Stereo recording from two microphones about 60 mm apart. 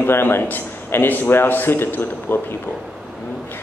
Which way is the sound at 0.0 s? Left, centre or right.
Left.